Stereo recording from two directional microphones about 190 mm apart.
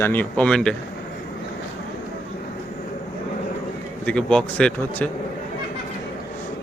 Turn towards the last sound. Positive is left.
turn(degrees=5)  # may be behind; listen again after turning